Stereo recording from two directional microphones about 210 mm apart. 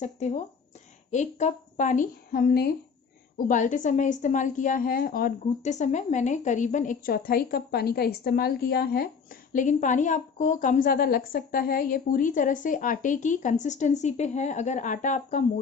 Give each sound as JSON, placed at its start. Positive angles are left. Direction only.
{"t": 0.0, "sound": "a woman's voice", "side_deg": 35}